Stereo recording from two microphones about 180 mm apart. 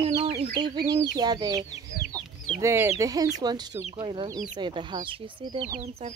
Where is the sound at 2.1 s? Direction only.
20° right (ahead or behind).